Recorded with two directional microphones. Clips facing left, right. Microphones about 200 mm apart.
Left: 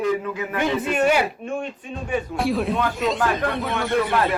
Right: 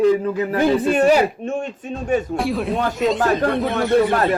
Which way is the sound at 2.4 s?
Centre (ahead or behind).